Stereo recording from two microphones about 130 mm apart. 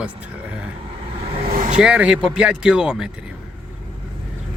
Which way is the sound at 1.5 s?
75° right (ahead or behind).